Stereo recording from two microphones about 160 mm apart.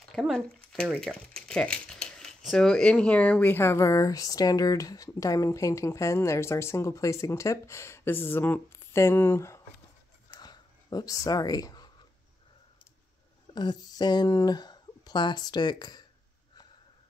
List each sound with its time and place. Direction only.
0.1 s speech: centre (ahead or behind); by 9.6 s 15° left (ahead or behind)
10.4 s a sound: 25° left (ahead or behind)
13.6 s speech: 25° left (ahead or behind)